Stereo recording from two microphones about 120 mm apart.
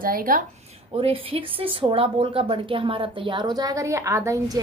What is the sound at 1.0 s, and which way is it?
A woman's voice, 50° right (ahead or behind).